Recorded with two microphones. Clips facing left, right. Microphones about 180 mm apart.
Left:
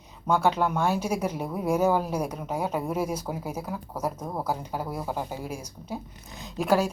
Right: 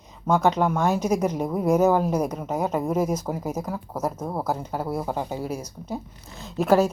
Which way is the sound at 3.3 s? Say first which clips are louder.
Right 4 dB; 10° right (ahead or behind).